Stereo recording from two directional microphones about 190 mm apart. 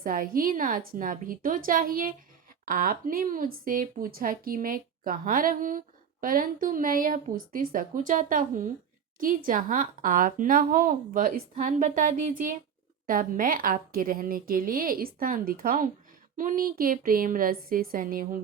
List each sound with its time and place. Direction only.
0.0 s speech: 45° right (ahead or behind)